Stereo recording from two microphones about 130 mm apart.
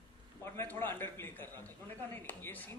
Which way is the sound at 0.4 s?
15° left (ahead or behind).